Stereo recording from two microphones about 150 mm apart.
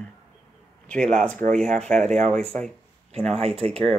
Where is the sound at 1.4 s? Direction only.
65° right (ahead or behind).